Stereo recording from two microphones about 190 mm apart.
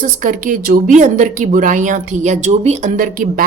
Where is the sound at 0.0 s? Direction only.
45° right (ahead or behind).